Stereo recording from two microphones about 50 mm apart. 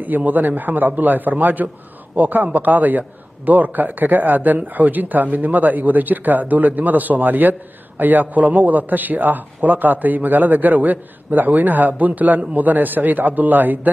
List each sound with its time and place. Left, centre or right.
0.0 s a man's voice: right